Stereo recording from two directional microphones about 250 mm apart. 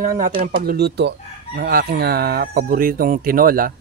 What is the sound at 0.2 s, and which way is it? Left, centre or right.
Speech, right.